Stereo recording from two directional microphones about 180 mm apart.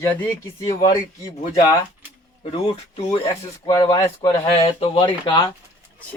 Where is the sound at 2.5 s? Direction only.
35° left (ahead or behind).